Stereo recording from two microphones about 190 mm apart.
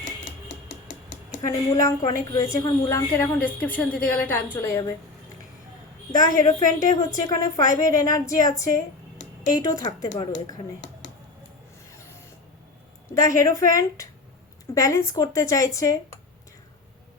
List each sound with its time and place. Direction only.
0.4 s typing: 75° left (ahead or behind)
1.4 s a woman's voice: 15° left (ahead or behind)
6.1 s a woman's voice: 20° left (ahead or behind)
9.8 s a woman's voice: 20° left (ahead or behind)
13.1 s a woman's voice: 15° left (ahead or behind)